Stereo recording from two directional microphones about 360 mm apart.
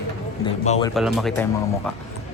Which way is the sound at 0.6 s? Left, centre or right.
Centre.